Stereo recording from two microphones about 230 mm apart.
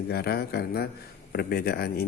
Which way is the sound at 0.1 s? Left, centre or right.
Left.